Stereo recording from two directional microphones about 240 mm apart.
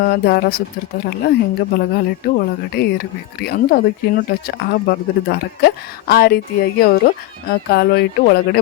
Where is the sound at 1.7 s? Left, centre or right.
Left.